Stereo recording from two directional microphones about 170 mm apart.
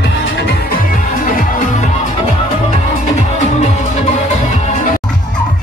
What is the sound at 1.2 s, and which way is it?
Music, 50° left (ahead or behind).